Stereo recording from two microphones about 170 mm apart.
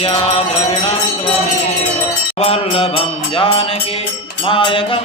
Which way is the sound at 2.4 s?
35° left (ahead or behind).